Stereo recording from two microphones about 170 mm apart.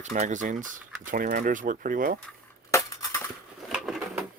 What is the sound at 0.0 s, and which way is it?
Speech, 45° right (ahead or behind).